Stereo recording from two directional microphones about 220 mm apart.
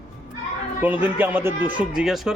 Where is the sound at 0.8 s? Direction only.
10° right (ahead or behind).